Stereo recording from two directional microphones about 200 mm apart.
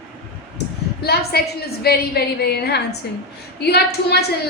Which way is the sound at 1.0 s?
55° left (ahead or behind).